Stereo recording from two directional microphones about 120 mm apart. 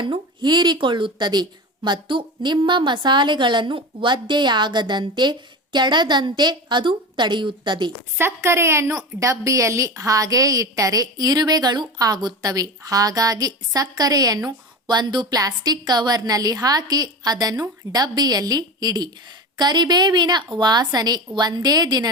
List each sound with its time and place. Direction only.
0.0 s a woman's voice: 40° right (ahead or behind)
8.2 s a woman's voice: 20° right (ahead or behind)